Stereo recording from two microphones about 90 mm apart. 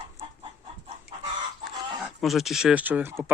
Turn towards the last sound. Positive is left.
turn(degrees=-20)  # may be behind; listen again after turning